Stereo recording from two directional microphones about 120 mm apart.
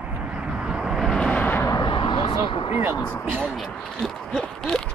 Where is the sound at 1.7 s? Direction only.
40° left (ahead or behind).